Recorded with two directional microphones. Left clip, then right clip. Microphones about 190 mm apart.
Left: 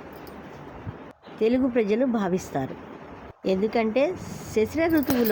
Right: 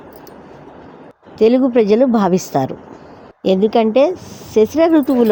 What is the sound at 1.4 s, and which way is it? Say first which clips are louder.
Speech: right 11 dB; 30° right (ahead or behind).